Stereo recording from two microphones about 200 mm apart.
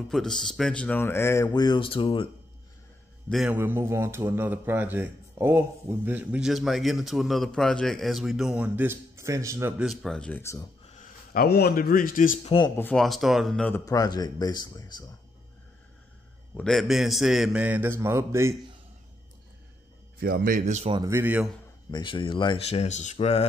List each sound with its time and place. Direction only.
0.1 s speech: centre (ahead or behind); by 2.2 s 25° left (ahead or behind)
3.3 s speech: centre (ahead or behind)
11.0 s a man's voice: 50° left (ahead or behind)
12.4 s speech: 25° left (ahead or behind)
12.7 s speech: 5° left (ahead or behind)
16.5 s a man's voice: centre (ahead or behind)
20.2 s speech: 50° right (ahead or behind); by 21.0 s 30° right (ahead or behind)
21.0 s speech: 10° right (ahead or behind)
21.9 s speech: 25° left (ahead or behind)